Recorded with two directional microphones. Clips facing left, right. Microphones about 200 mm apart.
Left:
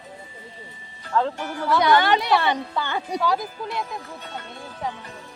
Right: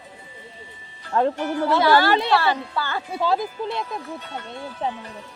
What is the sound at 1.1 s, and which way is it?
Speech, 20° right (ahead or behind).